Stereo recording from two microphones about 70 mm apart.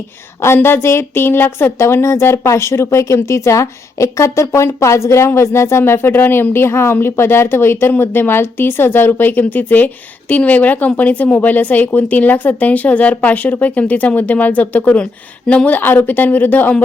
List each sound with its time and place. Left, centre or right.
0.4 s speech: left